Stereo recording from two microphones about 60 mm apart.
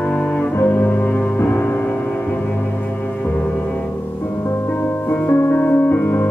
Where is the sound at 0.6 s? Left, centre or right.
Left.